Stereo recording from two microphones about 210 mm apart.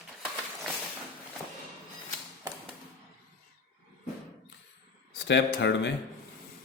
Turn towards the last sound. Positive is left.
turn(degrees=60)  # may be behind; listen again after turning